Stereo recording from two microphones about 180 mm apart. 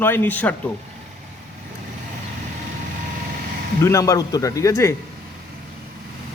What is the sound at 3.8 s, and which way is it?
A man's voice, 15° left (ahead or behind).